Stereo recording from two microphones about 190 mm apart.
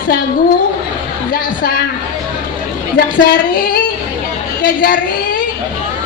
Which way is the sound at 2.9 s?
55° left (ahead or behind).